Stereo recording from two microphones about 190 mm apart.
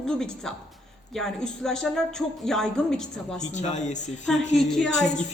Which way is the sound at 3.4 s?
40° left (ahead or behind).